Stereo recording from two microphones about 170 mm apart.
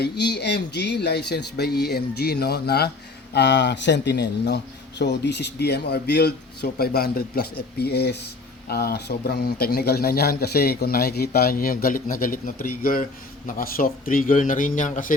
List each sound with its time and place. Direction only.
0.0 s a man's voice: 80° left
3.3 s a man's voice: 85° left; by 15.1 s 50° left (ahead or behind)